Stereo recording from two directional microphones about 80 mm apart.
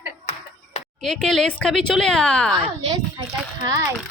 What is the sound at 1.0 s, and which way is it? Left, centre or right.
A woman's voice, centre.